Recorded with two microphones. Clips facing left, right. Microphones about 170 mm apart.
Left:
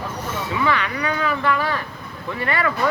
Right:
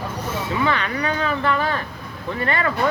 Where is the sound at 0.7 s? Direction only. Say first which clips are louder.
Even; 35° right (ahead or behind).